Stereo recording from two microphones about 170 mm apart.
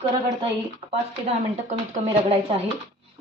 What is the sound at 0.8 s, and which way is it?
Speech, 35° right (ahead or behind).